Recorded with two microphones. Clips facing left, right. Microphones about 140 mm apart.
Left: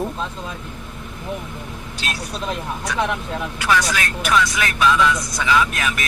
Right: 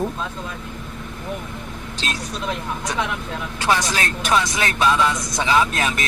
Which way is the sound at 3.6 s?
30° right (ahead or behind).